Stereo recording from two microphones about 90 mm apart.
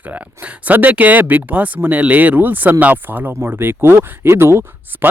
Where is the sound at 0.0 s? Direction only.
20° right (ahead or behind).